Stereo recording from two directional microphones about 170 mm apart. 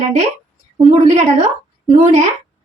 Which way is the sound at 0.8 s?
40° right (ahead or behind).